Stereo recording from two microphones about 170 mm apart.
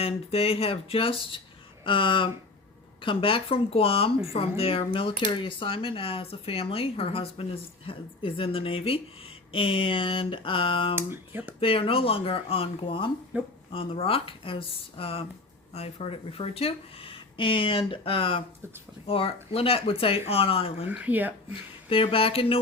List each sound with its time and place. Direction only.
0.0 s speech: 35° left (ahead or behind)
10.9 s speech: 15° right (ahead or behind)
11.6 s speech: 30° left (ahead or behind)
13.3 s speech: 10° right (ahead or behind)
13.7 s speech: 30° left (ahead or behind)
20.9 s speech: 10° right (ahead or behind)
21.5 s speech: 30° left (ahead or behind)